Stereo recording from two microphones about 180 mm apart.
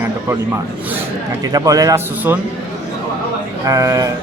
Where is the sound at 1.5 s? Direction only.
20° right (ahead or behind).